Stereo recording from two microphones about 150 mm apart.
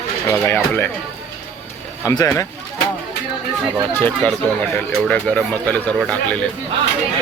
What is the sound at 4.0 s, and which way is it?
Speech, 10° left (ahead or behind).